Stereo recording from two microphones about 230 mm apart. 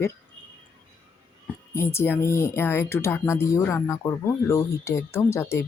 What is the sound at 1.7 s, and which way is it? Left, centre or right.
Speech, centre.